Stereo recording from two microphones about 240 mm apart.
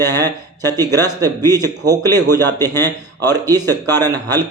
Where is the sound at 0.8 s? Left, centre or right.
Centre.